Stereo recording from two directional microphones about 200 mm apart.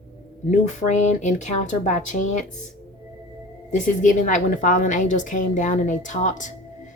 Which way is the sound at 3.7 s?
40° left (ahead or behind).